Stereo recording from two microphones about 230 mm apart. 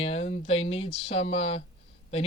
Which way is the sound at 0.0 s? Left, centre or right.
Left.